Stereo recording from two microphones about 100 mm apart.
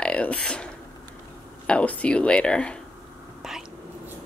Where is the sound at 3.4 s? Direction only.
5° right (ahead or behind).